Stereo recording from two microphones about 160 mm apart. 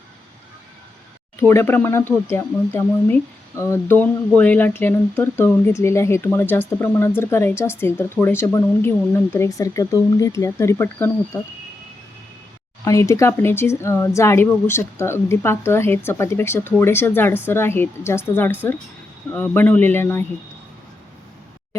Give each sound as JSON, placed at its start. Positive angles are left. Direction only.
{"t": 1.4, "sound": "speech", "side_deg": 15}
{"t": 12.8, "sound": "speech", "side_deg": 20}